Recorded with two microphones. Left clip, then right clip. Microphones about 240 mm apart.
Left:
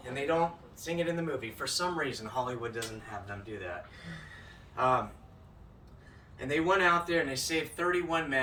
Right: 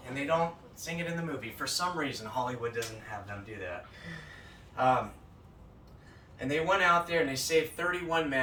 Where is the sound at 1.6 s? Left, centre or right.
Centre.